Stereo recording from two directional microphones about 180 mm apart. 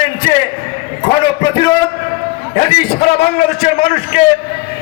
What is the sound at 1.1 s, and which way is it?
Speech, 25° left (ahead or behind).